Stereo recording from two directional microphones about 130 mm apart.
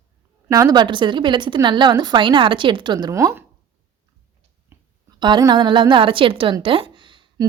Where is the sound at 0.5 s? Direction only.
30° right (ahead or behind).